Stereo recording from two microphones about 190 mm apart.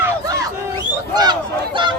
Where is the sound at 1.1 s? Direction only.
20° right (ahead or behind).